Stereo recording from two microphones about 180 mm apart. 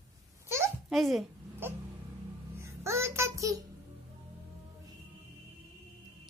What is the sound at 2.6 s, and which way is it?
Child singing, 15° right (ahead or behind).